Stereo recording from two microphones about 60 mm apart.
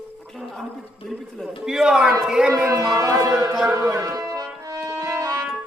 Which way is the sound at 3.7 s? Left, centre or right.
Right.